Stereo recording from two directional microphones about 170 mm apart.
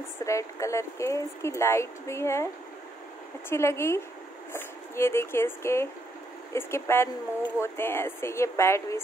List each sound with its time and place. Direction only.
0.2 s speech: 20° left (ahead or behind)
3.4 s speech: 15° left (ahead or behind)